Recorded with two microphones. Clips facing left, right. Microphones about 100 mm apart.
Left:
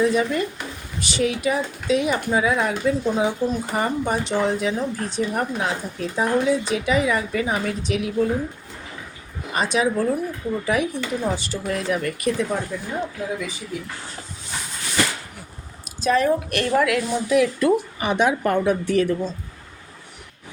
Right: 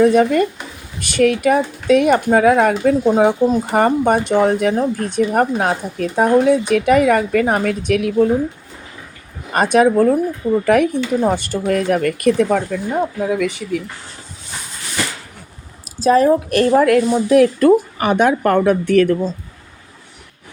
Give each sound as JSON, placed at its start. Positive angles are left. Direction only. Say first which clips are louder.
{"t": 0.0, "sound": "speech", "louder": "right 8 dB", "side_deg": -55}
{"t": 9.5, "sound": "a woman's voice", "louder": "right 8 dB", "side_deg": -55}
{"t": 16.0, "sound": "a woman's voice", "louder": "right 7 dB", "side_deg": -35}